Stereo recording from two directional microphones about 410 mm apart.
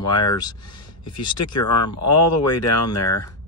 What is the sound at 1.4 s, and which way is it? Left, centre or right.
Speech, left.